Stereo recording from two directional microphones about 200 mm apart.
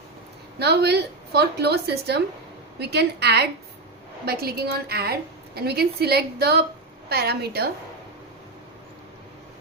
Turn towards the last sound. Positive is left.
turn(degrees=-50)  # may be behind; listen again after turning